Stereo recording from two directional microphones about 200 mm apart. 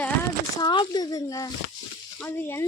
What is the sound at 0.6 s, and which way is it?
A woman's voice, 20° left (ahead or behind).